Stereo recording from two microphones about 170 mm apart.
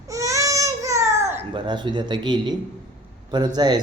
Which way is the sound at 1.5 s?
25° right (ahead or behind).